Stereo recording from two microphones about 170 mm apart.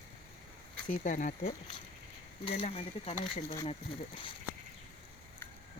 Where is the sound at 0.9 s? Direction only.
50° left (ahead or behind).